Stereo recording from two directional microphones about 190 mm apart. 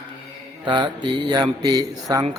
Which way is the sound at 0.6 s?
25° right (ahead or behind).